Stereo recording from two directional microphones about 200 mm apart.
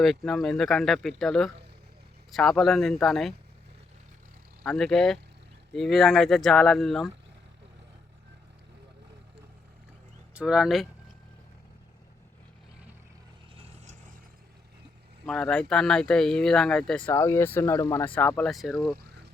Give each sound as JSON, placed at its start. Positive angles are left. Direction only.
{"t": 0.0, "sound": "speech", "side_deg": 0}
{"t": 4.6, "sound": "speech", "side_deg": 0}
{"t": 10.3, "sound": "speech", "side_deg": -5}
{"t": 13.6, "sound": "vehicle", "side_deg": -35}
{"t": 15.3, "sound": "speech", "side_deg": 0}
{"t": 17.1, "sound": "speech", "side_deg": 15}